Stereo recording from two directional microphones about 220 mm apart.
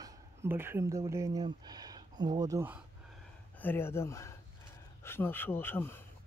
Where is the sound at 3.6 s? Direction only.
10° left (ahead or behind).